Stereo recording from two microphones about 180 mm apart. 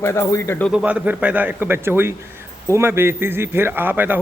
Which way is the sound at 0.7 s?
5° right (ahead or behind).